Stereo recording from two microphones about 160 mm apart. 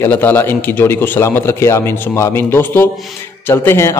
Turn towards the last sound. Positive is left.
turn(degrees=15)  # may be behind; listen again after turning